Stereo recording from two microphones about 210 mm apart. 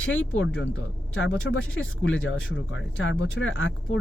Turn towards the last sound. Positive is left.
turn(degrees=65)  # may be behind; listen again after turning